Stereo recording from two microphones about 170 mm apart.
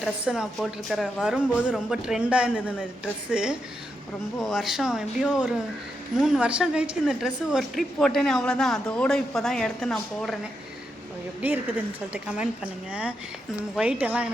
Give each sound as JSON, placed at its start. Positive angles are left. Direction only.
{"t": 0.0, "sound": "a woman's voice", "side_deg": -5}
{"t": 11.4, "sound": "speech", "side_deg": -10}